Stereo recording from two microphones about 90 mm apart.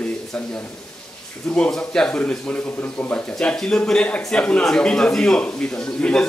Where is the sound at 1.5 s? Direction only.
10° left (ahead or behind).